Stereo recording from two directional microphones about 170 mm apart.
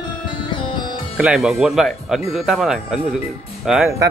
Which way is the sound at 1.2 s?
Centre (ahead or behind).